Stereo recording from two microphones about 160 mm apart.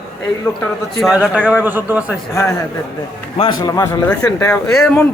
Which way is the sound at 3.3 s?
30° left (ahead or behind).